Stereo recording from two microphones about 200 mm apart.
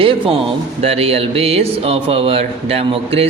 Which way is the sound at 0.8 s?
30° right (ahead or behind).